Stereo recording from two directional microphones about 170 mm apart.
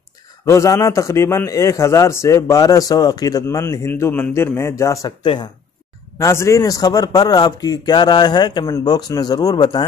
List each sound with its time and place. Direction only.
0.5 s a man's voice: 15° left (ahead or behind)